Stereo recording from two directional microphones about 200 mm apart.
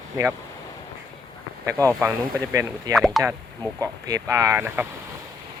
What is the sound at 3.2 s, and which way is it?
Speech, 15° right (ahead or behind).